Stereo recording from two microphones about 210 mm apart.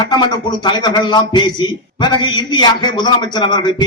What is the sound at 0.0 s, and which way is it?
Speech, 20° left (ahead or behind).